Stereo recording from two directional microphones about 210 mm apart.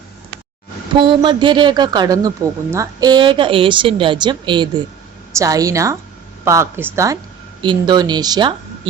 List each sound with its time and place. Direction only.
0.9 s a woman's voice: 25° right (ahead or behind)